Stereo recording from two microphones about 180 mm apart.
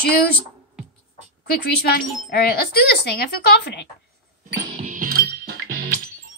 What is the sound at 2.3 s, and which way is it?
Speech, 60° left (ahead or behind).